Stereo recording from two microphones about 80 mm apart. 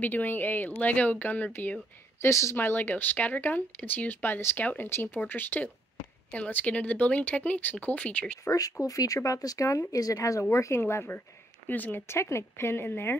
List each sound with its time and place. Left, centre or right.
0.0 s speech: left
2.2 s speech: left
2.5 s speech: left
8.5 s speech: left